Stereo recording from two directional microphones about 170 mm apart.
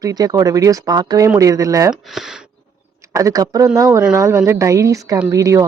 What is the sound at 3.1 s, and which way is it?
Speech, 20° right (ahead or behind).